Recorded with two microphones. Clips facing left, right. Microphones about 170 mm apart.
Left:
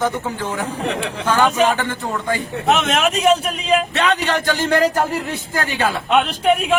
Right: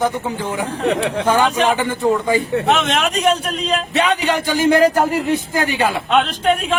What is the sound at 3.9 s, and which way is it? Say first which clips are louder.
A man's voice: right 2 dB; 10° right (ahead or behind).